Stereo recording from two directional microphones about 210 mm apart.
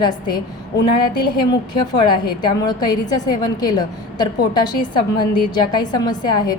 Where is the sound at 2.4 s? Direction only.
20° left (ahead or behind).